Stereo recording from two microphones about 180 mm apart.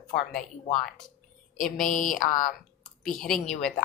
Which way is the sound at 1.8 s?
45° left (ahead or behind).